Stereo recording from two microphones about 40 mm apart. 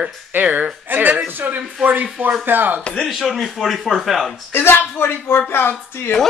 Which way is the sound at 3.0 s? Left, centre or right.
Centre.